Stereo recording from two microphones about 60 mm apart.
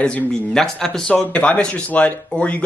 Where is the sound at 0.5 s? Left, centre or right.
Centre.